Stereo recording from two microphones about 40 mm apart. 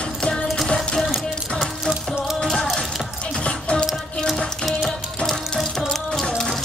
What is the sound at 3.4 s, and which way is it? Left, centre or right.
Music, left.